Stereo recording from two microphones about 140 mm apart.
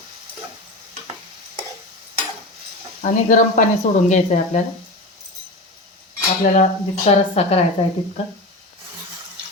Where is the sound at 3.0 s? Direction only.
65° left (ahead or behind).